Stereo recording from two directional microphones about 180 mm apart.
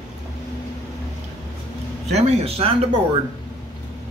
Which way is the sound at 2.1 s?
35° right (ahead or behind).